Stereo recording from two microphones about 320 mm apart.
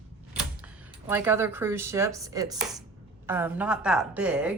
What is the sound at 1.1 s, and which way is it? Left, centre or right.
A woman's voice, centre.